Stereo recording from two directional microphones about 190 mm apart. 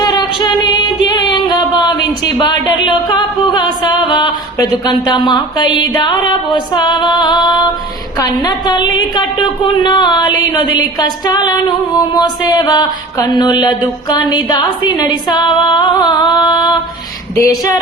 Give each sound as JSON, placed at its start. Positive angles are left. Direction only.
{"t": 0.0, "sound": "female singing", "side_deg": 25}
{"t": 1.0, "sound": "music", "side_deg": 25}
{"t": 2.4, "sound": "a sound", "side_deg": 25}
{"t": 17.3, "sound": "speech", "side_deg": 15}